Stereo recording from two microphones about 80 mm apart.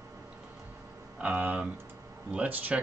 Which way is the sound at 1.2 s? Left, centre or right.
Right.